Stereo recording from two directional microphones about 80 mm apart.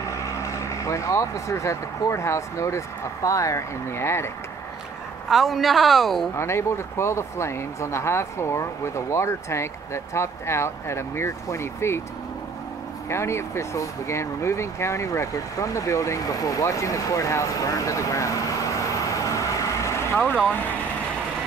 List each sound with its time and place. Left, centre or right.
0.4 s speech: left
5.3 s speech: centre
6.3 s speech: left
13.1 s speech: left
19.0 s vehicle: left